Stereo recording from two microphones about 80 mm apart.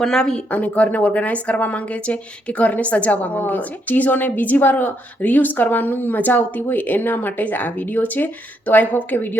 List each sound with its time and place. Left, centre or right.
0.0 s speech: centre
0.5 s speech: centre